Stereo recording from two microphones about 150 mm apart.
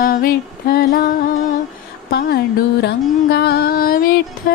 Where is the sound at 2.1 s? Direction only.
90° left.